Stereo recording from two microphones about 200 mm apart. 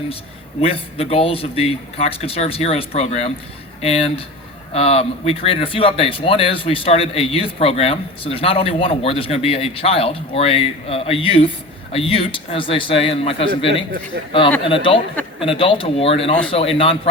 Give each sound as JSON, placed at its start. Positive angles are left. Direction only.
{"t": 0.6, "sound": "speech", "side_deg": 30}